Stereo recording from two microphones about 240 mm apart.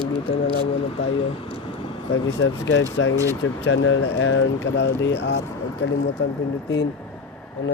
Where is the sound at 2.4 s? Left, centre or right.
Left.